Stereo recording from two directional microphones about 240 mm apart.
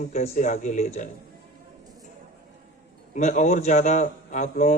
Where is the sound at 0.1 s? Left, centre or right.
Left.